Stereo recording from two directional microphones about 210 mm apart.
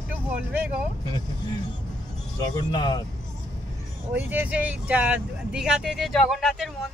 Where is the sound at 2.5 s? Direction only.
20° left (ahead or behind).